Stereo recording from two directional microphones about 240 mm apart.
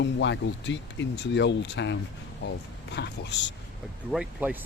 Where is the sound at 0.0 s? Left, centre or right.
Left.